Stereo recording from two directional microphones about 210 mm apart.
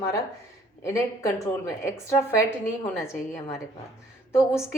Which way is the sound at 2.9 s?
15° left (ahead or behind).